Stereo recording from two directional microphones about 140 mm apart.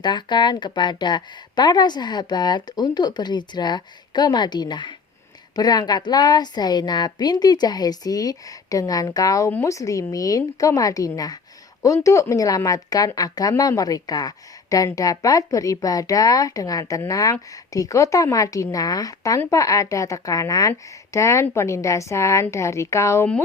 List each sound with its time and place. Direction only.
0.0 s speech: 35° left (ahead or behind)